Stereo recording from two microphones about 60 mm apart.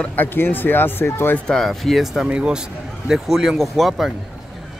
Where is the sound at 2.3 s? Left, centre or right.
Centre.